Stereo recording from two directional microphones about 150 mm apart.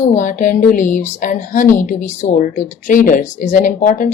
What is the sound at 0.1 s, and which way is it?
A woman's voice, 55° left (ahead or behind).